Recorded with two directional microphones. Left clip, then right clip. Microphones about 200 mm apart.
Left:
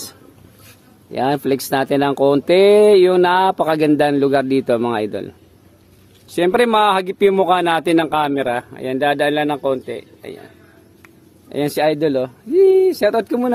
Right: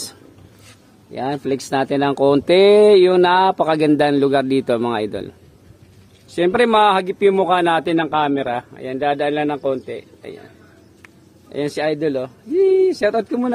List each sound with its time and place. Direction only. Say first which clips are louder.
1.1 s speech: left 4 dB; 25° left (ahead or behind); by 5.3 s 10° left (ahead or behind)
6.3 s speech: even; 30° left (ahead or behind)
11.4 s speech: left 4 dB; 55° left (ahead or behind)